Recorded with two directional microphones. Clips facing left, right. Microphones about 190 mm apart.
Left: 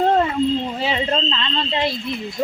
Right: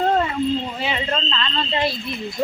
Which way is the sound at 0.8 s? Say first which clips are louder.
Left 3 dB; 35° left (ahead or behind).